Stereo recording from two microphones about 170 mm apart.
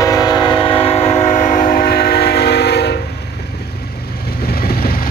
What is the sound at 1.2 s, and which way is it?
Train, 45° left (ahead or behind).